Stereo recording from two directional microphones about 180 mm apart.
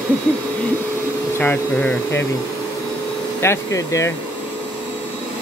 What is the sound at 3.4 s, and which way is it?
Speech, 15° left (ahead or behind).